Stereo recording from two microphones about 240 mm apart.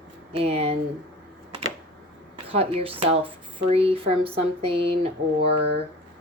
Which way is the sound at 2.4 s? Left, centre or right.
Right.